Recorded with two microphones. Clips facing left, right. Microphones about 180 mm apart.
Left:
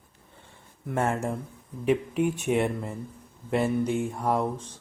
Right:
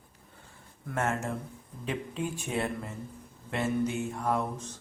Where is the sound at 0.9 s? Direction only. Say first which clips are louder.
Left 4 dB; 30° left (ahead or behind).